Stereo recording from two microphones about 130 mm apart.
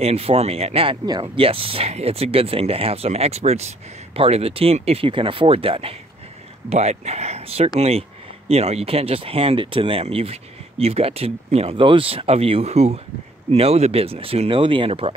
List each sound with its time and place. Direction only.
0.0 s speech: 50° right (ahead or behind)
6.7 s speech: 55° right (ahead or behind)